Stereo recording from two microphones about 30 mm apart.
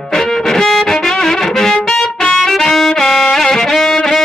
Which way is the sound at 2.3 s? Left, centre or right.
Centre.